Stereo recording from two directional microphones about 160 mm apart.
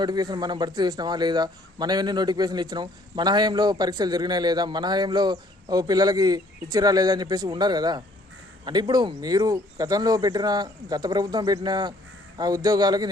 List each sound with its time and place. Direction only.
0.0 s a man's voice: 25° right (ahead or behind)